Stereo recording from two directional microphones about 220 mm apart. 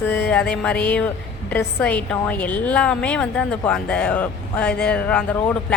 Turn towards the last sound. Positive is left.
turn(degrees=5)  # may be behind; listen again after turning